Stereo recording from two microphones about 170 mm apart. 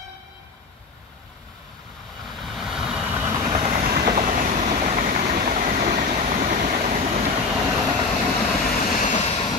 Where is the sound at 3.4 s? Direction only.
40° right (ahead or behind).